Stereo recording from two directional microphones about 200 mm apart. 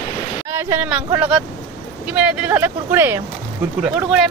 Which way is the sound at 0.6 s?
10° right (ahead or behind).